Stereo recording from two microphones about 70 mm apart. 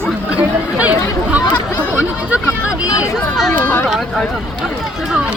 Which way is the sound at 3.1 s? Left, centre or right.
Centre.